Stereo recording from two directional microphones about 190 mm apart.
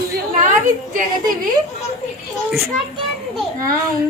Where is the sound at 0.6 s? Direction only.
45° right (ahead or behind).